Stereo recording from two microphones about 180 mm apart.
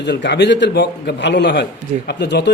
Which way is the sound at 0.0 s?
70° left (ahead or behind).